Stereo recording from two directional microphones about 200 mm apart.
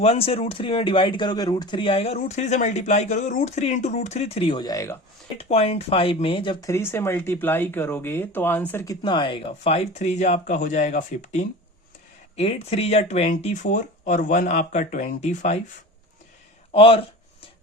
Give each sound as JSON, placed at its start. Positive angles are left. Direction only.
{"t": 0.0, "sound": "speech", "side_deg": 30}
{"t": 5.4, "sound": "speech", "side_deg": 30}
{"t": 16.7, "sound": "a sound", "side_deg": 30}